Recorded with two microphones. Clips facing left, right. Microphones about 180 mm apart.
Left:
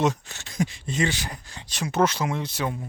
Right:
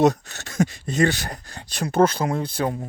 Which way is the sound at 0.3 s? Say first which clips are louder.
Right 5 dB; 55° right (ahead or behind).